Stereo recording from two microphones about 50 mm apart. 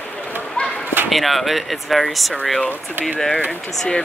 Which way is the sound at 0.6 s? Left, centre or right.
Left.